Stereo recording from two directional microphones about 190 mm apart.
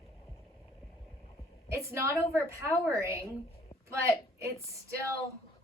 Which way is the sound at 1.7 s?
15° right (ahead or behind).